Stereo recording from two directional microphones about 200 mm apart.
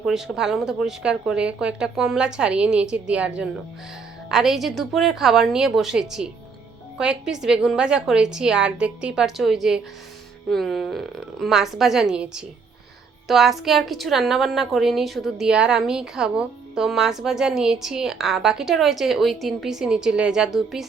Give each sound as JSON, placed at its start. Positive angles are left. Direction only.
{"t": 0.0, "sound": "a woman's voice", "side_deg": 0}